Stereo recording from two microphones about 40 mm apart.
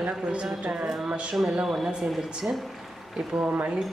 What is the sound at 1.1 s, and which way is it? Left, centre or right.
Speech, right.